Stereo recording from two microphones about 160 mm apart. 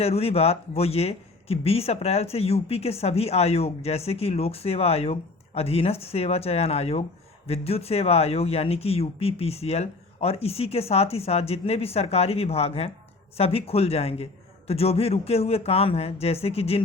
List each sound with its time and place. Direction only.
0.0 s speech: 40° left (ahead or behind)